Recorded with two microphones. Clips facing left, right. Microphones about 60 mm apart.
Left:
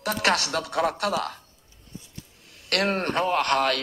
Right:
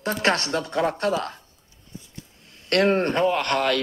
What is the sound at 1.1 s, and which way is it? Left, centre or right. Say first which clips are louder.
Speech: right 1 dB; right.